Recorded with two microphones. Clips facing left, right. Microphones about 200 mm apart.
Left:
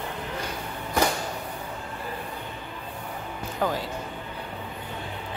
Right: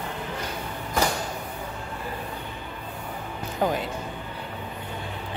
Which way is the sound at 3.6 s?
20° right (ahead or behind).